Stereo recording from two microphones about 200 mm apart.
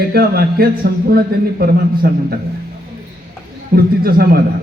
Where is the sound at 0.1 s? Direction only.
50° right (ahead or behind).